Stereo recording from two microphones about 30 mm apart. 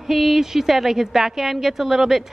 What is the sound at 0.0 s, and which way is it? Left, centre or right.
A woman's voice, centre.